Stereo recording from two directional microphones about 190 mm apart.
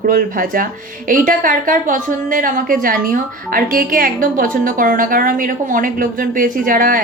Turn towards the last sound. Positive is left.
turn(degrees=-45)  # may be behind; listen again after turning